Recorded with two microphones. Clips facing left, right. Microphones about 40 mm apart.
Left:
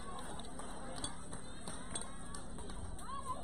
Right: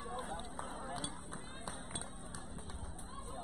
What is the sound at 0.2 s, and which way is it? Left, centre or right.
Run, right.